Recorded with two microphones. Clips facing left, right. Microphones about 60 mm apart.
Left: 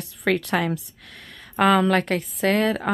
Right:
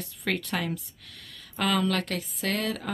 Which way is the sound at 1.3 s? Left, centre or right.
Left.